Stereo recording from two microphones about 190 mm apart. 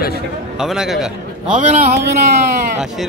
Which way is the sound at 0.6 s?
Centre (ahead or behind).